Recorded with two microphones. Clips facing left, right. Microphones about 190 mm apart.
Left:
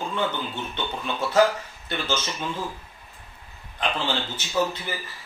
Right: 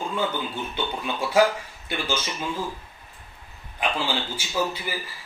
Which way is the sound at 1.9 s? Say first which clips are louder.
Even; 10° right (ahead or behind).